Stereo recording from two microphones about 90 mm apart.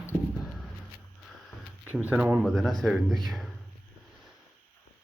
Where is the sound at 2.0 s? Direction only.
15° right (ahead or behind).